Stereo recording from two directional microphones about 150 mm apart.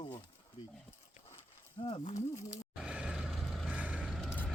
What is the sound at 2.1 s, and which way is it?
Speech, 20° left (ahead or behind).